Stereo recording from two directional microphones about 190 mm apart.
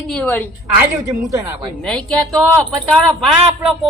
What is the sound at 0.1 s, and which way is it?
Speech, 5° left (ahead or behind).